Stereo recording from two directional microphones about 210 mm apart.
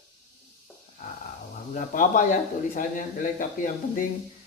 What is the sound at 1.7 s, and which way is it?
Speech, 40° left (ahead or behind).